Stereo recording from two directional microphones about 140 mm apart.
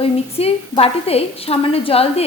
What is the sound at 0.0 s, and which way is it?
A woman's voice, 45° left (ahead or behind).